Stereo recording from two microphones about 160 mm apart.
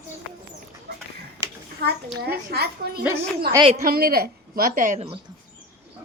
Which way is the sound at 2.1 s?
85° right.